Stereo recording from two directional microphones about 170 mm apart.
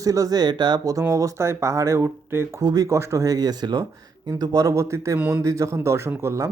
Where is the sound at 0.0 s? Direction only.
20° right (ahead or behind).